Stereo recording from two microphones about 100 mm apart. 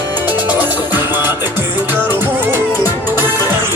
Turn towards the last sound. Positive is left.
turn(degrees=-20)  # may be behind; listen again after turning